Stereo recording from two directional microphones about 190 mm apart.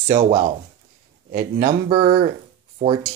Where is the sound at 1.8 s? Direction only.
30° right (ahead or behind).